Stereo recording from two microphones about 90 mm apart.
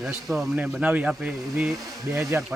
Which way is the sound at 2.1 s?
35° right (ahead or behind).